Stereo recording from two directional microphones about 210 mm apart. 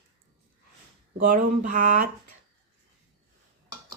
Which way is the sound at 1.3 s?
40° right (ahead or behind).